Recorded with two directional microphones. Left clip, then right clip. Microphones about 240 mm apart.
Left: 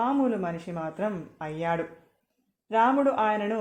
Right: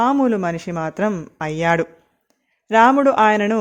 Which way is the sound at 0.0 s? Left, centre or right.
Right.